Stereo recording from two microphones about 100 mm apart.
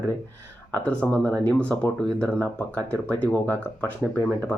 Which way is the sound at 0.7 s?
15° left (ahead or behind).